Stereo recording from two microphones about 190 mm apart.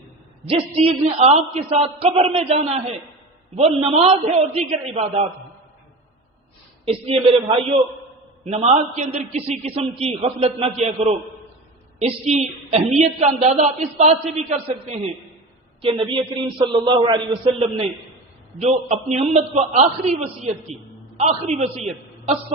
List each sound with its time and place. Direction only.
0.4 s a woman's voice: 30° right (ahead or behind)
6.8 s a woman's voice: 30° right (ahead or behind)